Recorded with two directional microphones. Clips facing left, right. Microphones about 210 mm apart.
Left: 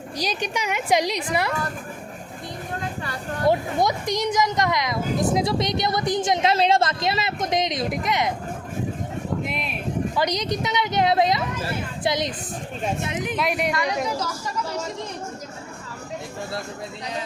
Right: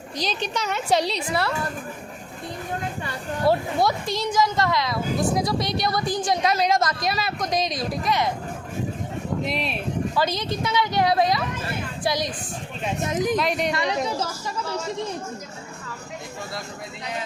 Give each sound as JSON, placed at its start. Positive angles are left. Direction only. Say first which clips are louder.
{"t": 0.2, "sound": "a woman's voice", "louder": "even", "side_deg": 10}
{"t": 3.5, "sound": "speech", "louder": "even", "side_deg": 20}
{"t": 9.4, "sound": "speech", "louder": "right 2 dB", "side_deg": -35}
{"t": 10.2, "sound": "speech", "louder": "left 1 dB", "side_deg": 20}
{"t": 13.0, "sound": "speech", "louder": "right 4 dB", "side_deg": -40}
{"t": 13.3, "sound": "speech", "louder": "right 1 dB", "side_deg": 5}
{"t": 13.7, "sound": "a woman's voice", "louder": "even", "side_deg": -25}